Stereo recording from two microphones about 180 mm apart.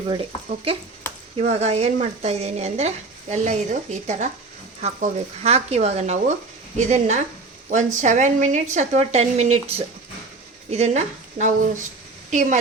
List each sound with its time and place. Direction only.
0.1 s speech: 30° right (ahead or behind)